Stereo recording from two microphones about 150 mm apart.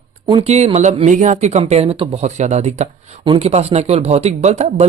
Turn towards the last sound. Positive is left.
turn(degrees=-50)  # may be behind; listen again after turning